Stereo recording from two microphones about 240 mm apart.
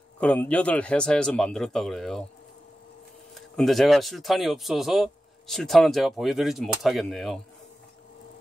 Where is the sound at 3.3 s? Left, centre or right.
Centre.